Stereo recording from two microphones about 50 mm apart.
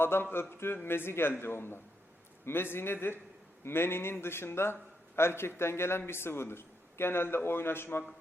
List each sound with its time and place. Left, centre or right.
0.0 s a man's voice: left